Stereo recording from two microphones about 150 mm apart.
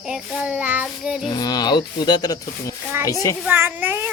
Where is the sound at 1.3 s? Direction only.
25° left (ahead or behind).